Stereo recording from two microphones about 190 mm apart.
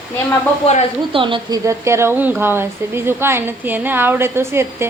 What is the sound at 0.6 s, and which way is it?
Speech, 30° left (ahead or behind).